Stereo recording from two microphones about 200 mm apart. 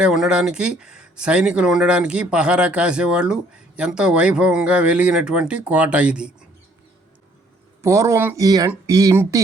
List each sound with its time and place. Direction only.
0.0 s speech: 5° right (ahead or behind)
7.8 s speech: 15° right (ahead or behind)